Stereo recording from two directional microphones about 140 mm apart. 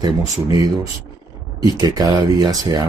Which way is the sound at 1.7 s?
30° right (ahead or behind).